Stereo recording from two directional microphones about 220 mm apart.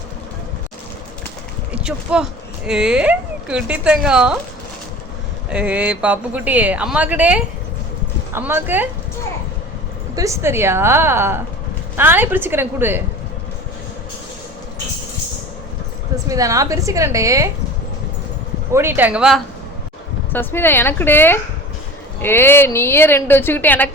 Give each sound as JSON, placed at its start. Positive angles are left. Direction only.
{"t": 1.7, "sound": "speech", "side_deg": -5}
{"t": 5.5, "sound": "speech", "side_deg": -5}
{"t": 10.2, "sound": "speech", "side_deg": -15}
{"t": 16.3, "sound": "speech", "side_deg": -15}
{"t": 18.7, "sound": "speech", "side_deg": -10}
{"t": 20.3, "sound": "a woman's voice", "side_deg": 10}